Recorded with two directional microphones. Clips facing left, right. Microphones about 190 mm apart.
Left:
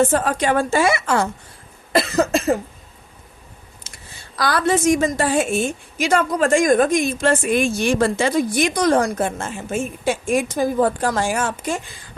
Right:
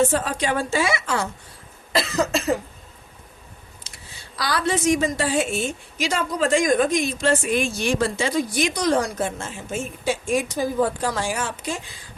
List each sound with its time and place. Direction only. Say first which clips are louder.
0.0 s a woman's voice: left 3 dB; 50° left (ahead or behind)
3.8 s a woman's voice: left 2 dB; 50° left (ahead or behind)